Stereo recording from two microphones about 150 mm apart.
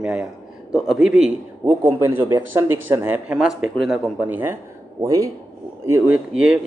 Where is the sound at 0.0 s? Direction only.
5° right (ahead or behind).